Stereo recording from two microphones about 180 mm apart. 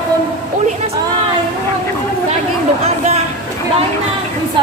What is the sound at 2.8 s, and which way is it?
Speech, 35° right (ahead or behind).